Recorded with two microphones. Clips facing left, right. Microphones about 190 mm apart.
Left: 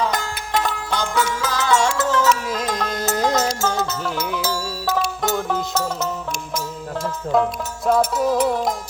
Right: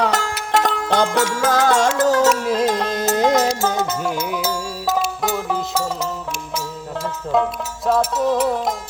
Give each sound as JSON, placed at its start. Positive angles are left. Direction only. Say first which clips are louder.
{"t": 0.0, "sound": "music", "louder": "right 3 dB", "side_deg": -70}
{"t": 1.4, "sound": "music", "louder": "right 5 dB", "side_deg": -55}
{"t": 2.5, "sound": "music", "louder": "right 5 dB", "side_deg": -30}
{"t": 4.9, "sound": "music", "louder": "left 1 dB", "side_deg": -5}
{"t": 7.0, "sound": "music", "louder": "even", "side_deg": 0}